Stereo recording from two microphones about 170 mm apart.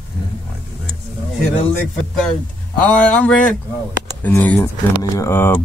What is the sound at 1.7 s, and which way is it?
Speech, 5° left (ahead or behind).